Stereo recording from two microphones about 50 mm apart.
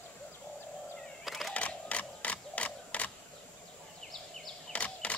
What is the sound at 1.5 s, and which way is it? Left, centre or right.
Camera, left.